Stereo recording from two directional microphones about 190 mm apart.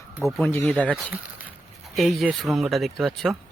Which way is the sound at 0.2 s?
Centre (ahead or behind).